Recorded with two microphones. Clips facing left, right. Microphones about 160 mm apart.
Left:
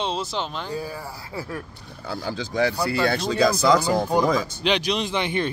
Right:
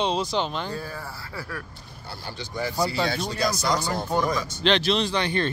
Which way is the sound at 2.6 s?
90° left.